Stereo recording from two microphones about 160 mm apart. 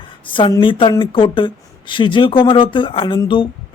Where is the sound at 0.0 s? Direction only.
30° left (ahead or behind).